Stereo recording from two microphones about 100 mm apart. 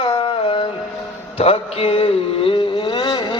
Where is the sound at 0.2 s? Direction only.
65° left (ahead or behind).